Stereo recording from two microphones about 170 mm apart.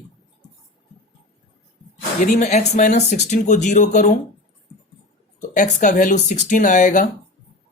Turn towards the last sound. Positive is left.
turn(degrees=50)  # may be behind; listen again after turning